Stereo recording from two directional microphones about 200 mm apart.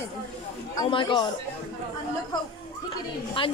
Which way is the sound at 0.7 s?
25° left (ahead or behind).